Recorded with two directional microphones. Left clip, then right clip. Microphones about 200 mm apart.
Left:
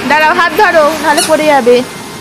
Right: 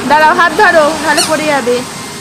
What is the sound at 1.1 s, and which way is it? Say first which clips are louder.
Music: left 3 dB; 25° left (ahead or behind).